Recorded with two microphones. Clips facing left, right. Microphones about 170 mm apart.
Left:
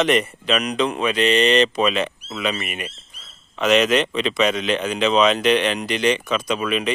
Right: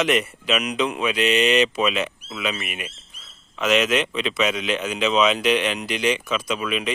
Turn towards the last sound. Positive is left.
turn(degrees=0)  # may be behind; listen again after turning